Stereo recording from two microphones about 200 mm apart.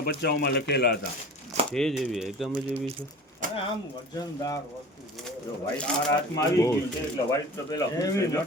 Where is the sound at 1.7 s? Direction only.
Centre (ahead or behind).